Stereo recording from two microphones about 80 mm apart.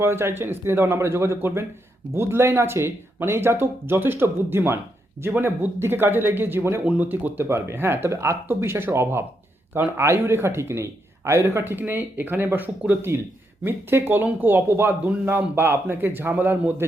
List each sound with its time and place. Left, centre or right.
0.0 s a man's voice: right
6.8 s a man's voice: centre